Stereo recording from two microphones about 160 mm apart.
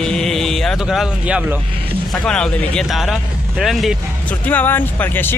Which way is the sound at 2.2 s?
5° left (ahead or behind).